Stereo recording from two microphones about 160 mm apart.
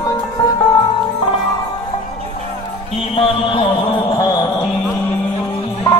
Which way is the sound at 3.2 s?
35° left (ahead or behind).